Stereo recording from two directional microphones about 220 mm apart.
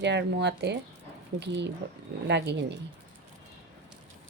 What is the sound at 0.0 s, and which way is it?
Speech, 50° right (ahead or behind).